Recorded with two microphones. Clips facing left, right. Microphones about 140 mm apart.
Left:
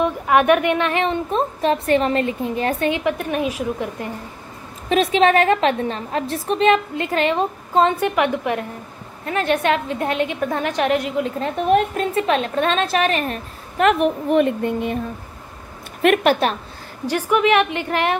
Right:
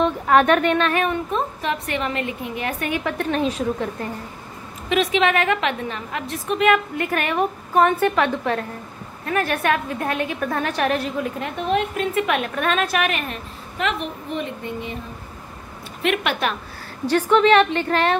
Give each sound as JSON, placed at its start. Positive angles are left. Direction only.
{"t": 0.0, "sound": "a woman's voice", "side_deg": 15}
{"t": 2.9, "sound": "a woman's voice", "side_deg": 15}
{"t": 4.8, "sound": "a woman's voice", "side_deg": 35}
{"t": 11.3, "sound": "a woman's voice", "side_deg": 30}
{"t": 11.6, "sound": "a woman's voice", "side_deg": 45}
{"t": 12.1, "sound": "a woman's voice", "side_deg": 30}
{"t": 16.0, "sound": "a woman's voice", "side_deg": 50}
{"t": 17.0, "sound": "a woman's voice", "side_deg": 10}